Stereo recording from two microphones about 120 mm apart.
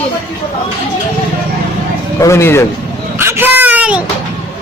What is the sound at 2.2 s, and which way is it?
Speech, 25° left (ahead or behind).